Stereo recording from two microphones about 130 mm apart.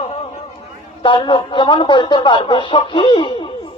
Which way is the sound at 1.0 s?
40° left (ahead or behind).